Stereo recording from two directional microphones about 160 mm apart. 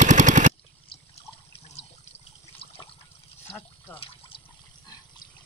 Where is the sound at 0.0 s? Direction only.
50° right (ahead or behind).